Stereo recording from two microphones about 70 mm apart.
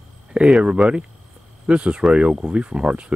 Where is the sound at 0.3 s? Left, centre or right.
Centre.